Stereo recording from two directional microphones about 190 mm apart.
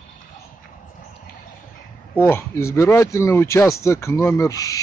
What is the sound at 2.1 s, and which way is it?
Speech, 10° left (ahead or behind).